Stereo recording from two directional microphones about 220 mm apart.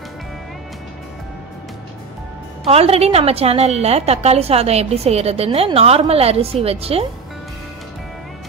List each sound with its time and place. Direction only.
2.6 s a woman's voice: 25° right (ahead or behind)